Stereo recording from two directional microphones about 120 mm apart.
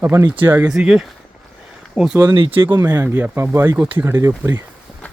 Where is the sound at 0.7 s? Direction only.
5° right (ahead or behind).